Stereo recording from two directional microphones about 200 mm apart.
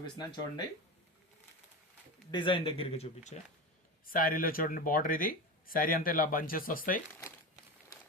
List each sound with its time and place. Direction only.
0.0 s speech: 20° left (ahead or behind)
2.3 s speech: 25° left (ahead or behind)
4.0 s speech: 45° left (ahead or behind)